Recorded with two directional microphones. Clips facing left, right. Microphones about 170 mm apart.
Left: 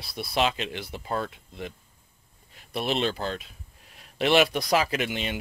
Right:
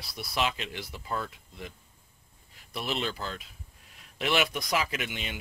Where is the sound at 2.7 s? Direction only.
25° left (ahead or behind).